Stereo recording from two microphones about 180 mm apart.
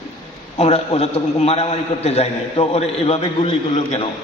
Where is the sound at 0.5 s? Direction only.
35° left (ahead or behind).